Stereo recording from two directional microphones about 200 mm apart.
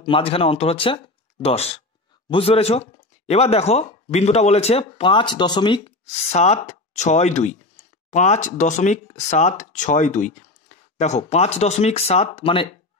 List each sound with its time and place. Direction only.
0.0 s speech: 25° left (ahead or behind)